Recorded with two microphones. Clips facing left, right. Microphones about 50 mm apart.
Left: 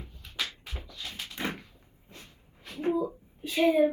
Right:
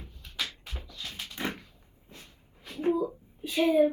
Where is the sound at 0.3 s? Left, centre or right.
Centre.